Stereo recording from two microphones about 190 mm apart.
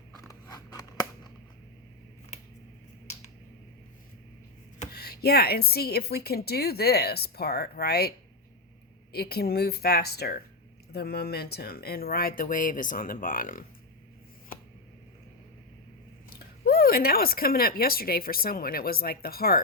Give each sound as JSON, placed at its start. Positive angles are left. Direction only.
{"t": 0.2, "sound": "scissors", "side_deg": 15}
{"t": 4.9, "sound": "a woman's voice", "side_deg": 55}
{"t": 9.1, "sound": "a woman's voice", "side_deg": 55}
{"t": 16.3, "sound": "speech", "side_deg": 55}